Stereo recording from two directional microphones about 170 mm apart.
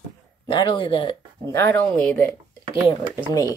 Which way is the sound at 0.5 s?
30° left (ahead or behind).